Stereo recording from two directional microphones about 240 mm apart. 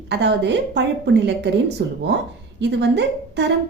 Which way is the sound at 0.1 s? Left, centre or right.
Right.